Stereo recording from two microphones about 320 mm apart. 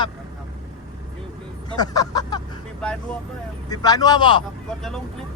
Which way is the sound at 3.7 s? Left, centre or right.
Centre.